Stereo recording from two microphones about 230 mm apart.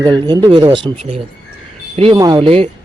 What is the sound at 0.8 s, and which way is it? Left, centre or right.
A man's voice, right.